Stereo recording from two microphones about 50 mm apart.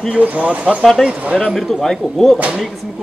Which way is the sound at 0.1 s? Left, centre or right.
Right.